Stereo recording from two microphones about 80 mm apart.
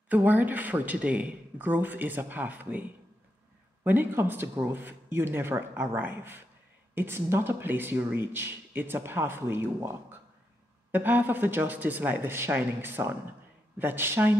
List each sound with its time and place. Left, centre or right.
0.1 s speech: centre
3.8 s speech: right
10.9 s speech: right